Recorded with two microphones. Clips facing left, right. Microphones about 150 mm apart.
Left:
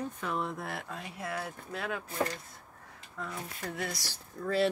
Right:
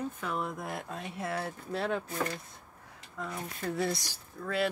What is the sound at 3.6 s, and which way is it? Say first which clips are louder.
Speech: right 6 dB; 25° right (ahead or behind).